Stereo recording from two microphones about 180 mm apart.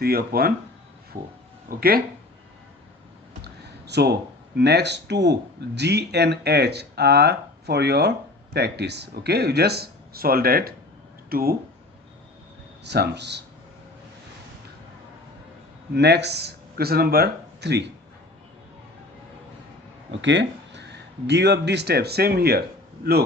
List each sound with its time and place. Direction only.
0.0 s speech: 60° right (ahead or behind)
3.4 s speech: 65° right (ahead or behind)
12.8 s speech: 70° right (ahead or behind)
16.0 s speech: 70° right (ahead or behind)
20.1 s speech: 85° right; by 22.6 s 60° right (ahead or behind)